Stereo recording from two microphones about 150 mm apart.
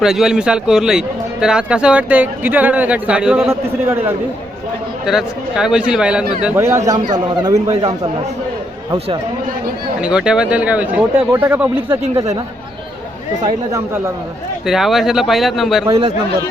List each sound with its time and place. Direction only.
0.0 s a man's voice: 5° right (ahead or behind)
5.0 s a man's voice: 5° right (ahead or behind)
6.8 s a man's voice: 25° right (ahead or behind)
10.0 s speech: 5° right (ahead or behind)
13.4 s a man's voice: 25° right (ahead or behind)
14.7 s a man's voice: centre (ahead or behind)